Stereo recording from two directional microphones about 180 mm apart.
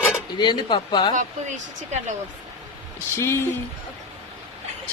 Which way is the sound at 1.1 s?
40° right (ahead or behind).